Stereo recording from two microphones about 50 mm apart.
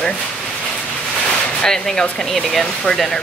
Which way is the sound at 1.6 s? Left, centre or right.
Centre.